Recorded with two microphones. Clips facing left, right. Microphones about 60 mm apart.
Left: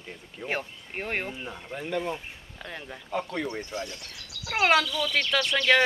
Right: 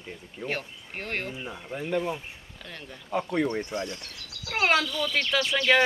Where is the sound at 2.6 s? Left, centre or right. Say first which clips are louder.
Left 3 dB; centre.